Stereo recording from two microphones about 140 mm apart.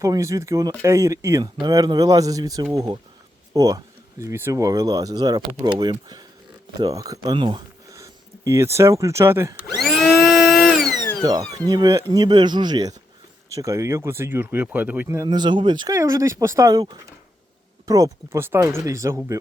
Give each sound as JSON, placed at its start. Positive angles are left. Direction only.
{"t": 0.0, "sound": "speech", "side_deg": -20}
{"t": 7.9, "sound": "speech", "side_deg": -20}
{"t": 9.8, "sound": "a sound", "side_deg": 0}
{"t": 11.2, "sound": "speech", "side_deg": -30}
{"t": 16.0, "sound": "speech", "side_deg": -20}